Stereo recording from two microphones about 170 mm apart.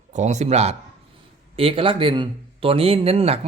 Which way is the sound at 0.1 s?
45° right (ahead or behind).